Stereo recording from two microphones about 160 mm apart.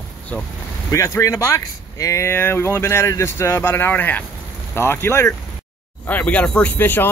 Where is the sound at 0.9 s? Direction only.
20° left (ahead or behind).